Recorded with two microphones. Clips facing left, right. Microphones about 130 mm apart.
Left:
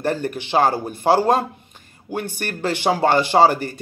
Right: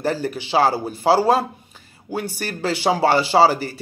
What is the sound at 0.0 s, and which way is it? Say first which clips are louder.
Speech: even; 50° left (ahead or behind).